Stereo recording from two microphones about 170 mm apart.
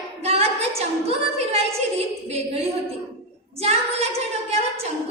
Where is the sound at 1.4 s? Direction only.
35° right (ahead or behind).